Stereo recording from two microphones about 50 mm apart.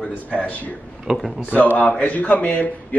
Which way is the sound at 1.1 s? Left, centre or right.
Centre.